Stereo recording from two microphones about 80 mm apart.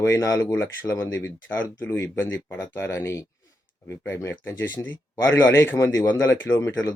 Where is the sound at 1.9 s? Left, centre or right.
Left.